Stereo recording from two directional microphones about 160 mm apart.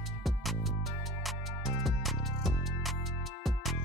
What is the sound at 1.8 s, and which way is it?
Music, centre (ahead or behind).